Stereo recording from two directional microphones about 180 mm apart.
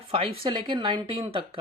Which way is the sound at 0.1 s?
25° right (ahead or behind).